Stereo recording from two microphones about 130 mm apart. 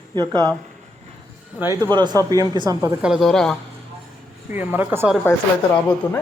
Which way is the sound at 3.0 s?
5° right (ahead or behind).